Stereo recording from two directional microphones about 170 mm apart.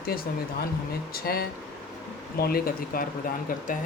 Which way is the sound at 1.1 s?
65° left (ahead or behind).